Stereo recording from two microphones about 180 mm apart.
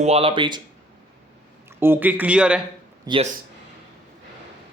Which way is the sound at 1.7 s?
10° right (ahead or behind).